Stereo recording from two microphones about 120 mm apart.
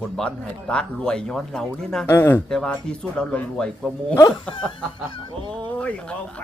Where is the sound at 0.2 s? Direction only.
5° left (ahead or behind).